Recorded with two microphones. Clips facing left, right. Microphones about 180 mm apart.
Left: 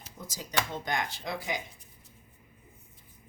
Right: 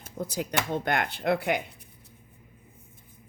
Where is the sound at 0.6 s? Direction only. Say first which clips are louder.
Right 6 dB; 60° right (ahead or behind).